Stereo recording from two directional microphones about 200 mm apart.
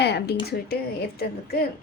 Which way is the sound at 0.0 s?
55° left (ahead or behind).